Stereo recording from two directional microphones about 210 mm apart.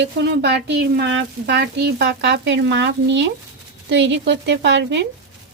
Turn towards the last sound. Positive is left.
turn(degrees=-55)  # may be behind; listen again after turning